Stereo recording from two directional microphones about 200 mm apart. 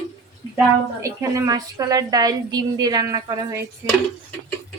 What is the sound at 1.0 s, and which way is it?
A woman's voice, 15° right (ahead or behind).